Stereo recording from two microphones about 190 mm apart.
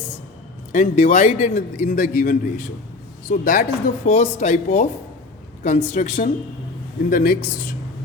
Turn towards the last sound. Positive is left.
turn(degrees=50)  # may be behind; listen again after turning